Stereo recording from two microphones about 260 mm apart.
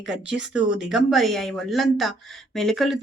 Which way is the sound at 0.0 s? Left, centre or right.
Centre.